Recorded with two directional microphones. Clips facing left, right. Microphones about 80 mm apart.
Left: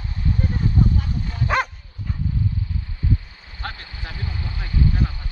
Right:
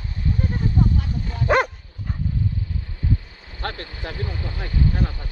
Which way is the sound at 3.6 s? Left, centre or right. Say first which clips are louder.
Right 3 dB; right.